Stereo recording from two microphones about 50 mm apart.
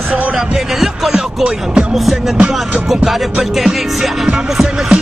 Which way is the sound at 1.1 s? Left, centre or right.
Centre.